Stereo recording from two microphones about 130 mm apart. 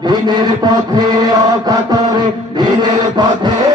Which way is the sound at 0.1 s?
35° right (ahead or behind).